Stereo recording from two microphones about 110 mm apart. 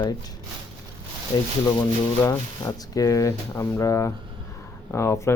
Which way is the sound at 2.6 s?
30° left (ahead or behind).